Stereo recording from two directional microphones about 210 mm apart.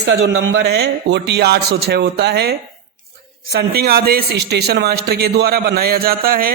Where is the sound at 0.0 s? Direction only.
55° right (ahead or behind).